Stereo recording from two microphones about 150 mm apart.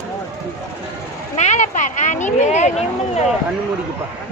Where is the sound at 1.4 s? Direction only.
50° left (ahead or behind).